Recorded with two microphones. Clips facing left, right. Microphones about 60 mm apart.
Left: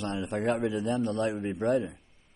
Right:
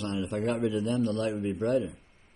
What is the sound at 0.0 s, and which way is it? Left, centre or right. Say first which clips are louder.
A man's voice: even; left.